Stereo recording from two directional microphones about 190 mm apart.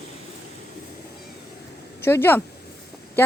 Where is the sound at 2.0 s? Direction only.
10° left (ahead or behind).